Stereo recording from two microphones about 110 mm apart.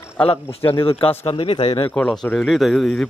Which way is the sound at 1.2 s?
50° left (ahead or behind).